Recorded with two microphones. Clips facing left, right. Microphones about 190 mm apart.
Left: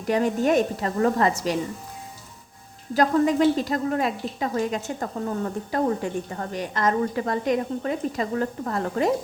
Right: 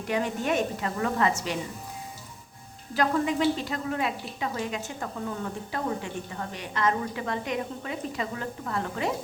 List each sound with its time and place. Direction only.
0.1 s a woman's voice: 40° left (ahead or behind)
2.9 s a woman's voice: 40° left (ahead or behind)